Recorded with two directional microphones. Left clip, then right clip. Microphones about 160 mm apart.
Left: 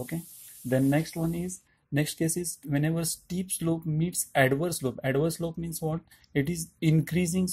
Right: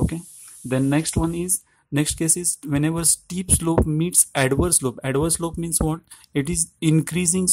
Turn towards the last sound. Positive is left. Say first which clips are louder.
# right 6 dB
turn(degrees=-30)  # may be behind; listen again after turning